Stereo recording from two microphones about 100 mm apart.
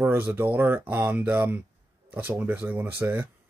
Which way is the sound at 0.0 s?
20° right (ahead or behind).